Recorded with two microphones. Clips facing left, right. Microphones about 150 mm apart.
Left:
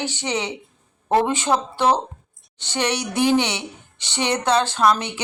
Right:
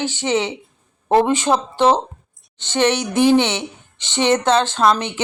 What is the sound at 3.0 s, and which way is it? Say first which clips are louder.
Speech: right 5 dB; 20° right (ahead or behind).